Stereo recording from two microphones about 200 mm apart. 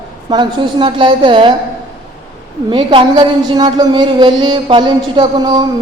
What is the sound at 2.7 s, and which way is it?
A woman's voice, 25° right (ahead or behind).